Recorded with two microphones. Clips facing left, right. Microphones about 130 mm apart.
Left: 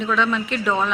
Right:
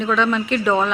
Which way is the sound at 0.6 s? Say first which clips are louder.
Right 3 dB; 15° right (ahead or behind).